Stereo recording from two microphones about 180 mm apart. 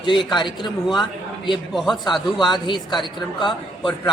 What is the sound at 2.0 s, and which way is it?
A man's voice, 25° left (ahead or behind).